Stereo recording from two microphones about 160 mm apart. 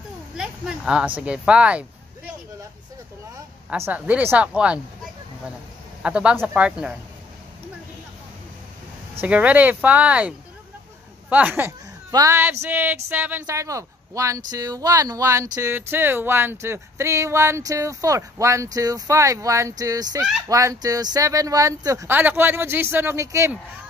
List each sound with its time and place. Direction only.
0.4 s speech: 5° right (ahead or behind)
3.7 s speech: 10° right (ahead or behind)
6.0 s speech: 5° right (ahead or behind)
9.2 s speech: 10° right (ahead or behind)